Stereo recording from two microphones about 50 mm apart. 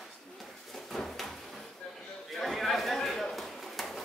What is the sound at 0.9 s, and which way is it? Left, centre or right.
Drawer open or close, centre.